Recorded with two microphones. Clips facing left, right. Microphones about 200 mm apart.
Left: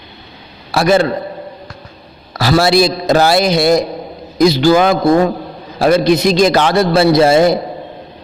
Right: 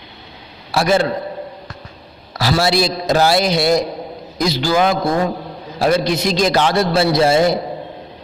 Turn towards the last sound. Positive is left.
turn(degrees=60)  # may be behind; listen again after turning